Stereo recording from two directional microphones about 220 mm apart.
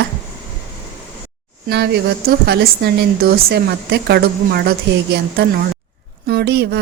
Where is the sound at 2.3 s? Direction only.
50° right (ahead or behind).